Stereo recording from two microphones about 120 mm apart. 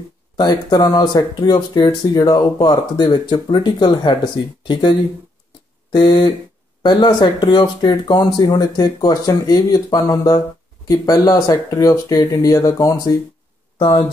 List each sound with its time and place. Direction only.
0.4 s speech: 35° left (ahead or behind)
13.7 s speech: 40° left (ahead or behind)